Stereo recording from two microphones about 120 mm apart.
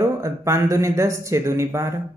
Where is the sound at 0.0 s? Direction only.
25° right (ahead or behind).